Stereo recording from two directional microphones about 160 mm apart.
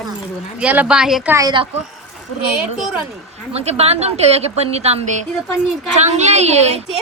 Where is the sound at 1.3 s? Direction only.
25° right (ahead or behind).